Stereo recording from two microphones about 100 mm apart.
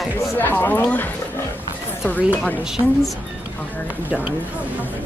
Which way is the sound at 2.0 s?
15° left (ahead or behind).